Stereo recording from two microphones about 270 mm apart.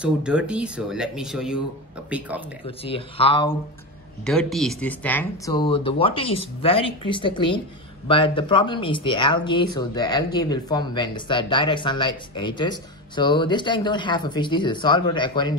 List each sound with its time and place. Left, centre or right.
0.0 s speech: centre
2.6 s speech: centre
4.3 s speech: centre